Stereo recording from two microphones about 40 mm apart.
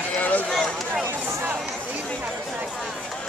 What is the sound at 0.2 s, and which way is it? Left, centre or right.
Run, left.